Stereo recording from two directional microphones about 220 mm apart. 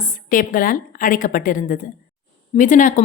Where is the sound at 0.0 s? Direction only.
40° left (ahead or behind).